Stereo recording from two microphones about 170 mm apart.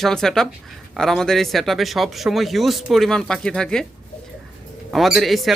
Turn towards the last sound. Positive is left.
turn(degrees=0)  # may be behind; listen again after turning